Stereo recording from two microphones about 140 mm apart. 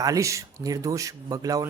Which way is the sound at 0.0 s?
25° right (ahead or behind).